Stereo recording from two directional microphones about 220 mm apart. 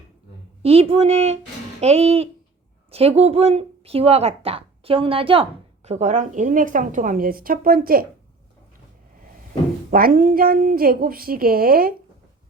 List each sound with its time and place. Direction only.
0.6 s speech: 25° right (ahead or behind)
9.9 s a woman's voice: 40° right (ahead or behind)